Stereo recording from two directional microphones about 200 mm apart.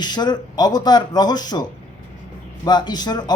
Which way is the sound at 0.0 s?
20° left (ahead or behind).